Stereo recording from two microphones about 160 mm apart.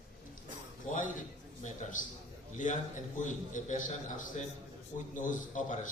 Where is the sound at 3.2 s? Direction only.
50° left (ahead or behind).